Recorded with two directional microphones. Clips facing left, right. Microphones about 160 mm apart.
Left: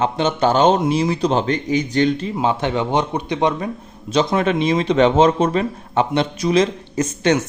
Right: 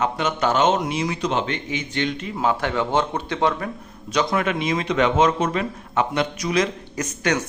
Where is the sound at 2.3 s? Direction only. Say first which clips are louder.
Left 3 dB; 20° left (ahead or behind).